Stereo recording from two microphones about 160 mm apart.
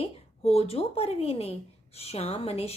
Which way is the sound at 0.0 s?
40° left (ahead or behind).